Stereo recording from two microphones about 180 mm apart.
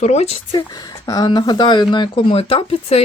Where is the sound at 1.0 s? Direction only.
20° left (ahead or behind).